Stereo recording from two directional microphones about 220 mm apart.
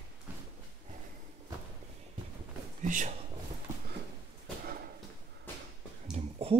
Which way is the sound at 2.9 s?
35° right (ahead or behind).